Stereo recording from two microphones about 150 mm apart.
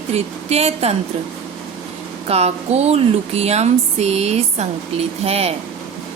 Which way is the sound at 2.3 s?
45° right (ahead or behind).